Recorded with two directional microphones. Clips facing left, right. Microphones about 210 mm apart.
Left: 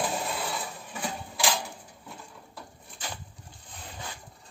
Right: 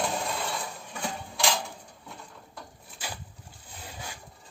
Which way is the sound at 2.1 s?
Centre (ahead or behind).